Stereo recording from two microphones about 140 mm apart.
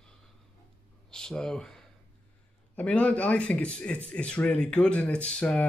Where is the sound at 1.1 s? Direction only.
5° left (ahead or behind).